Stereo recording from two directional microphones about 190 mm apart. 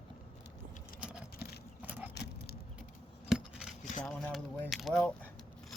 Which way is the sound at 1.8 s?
10° right (ahead or behind).